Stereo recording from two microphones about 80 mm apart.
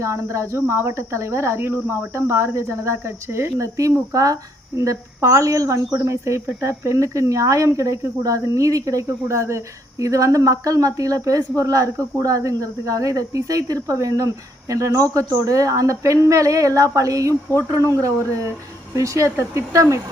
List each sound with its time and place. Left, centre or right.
0.0 s speech: right
17.5 s speech: left
17.9 s speech: right